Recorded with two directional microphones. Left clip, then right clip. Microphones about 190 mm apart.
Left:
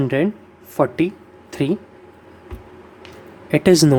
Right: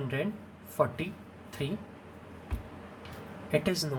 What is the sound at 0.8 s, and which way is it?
Speech, 45° left (ahead or behind).